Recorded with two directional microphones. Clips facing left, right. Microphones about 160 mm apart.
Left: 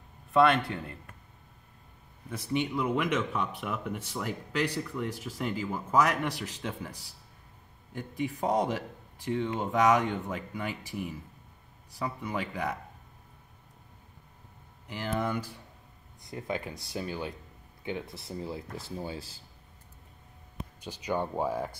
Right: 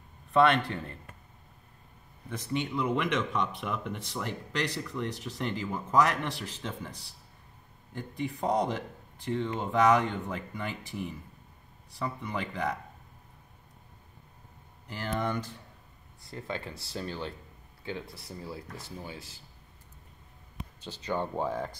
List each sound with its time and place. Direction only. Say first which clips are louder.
0.3 s speech: even; centre (ahead or behind)
2.2 s speech: left 2 dB; 10° left (ahead or behind)
7.9 s speech: left 1 dB; 10° left (ahead or behind)
14.9 s speech: left 1 dB; 5° left (ahead or behind); by 19.4 s 30° left (ahead or behind)
20.8 s speech: left 1 dB; 15° left (ahead or behind)